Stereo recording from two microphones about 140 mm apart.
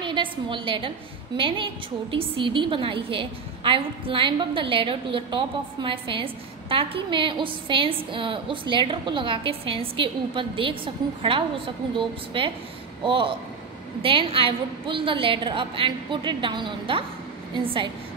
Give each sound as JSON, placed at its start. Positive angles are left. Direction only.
{"t": 0.0, "sound": "a woman's voice", "side_deg": -35}